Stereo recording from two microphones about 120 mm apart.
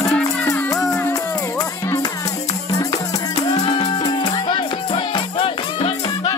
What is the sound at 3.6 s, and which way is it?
Music, 60° left (ahead or behind).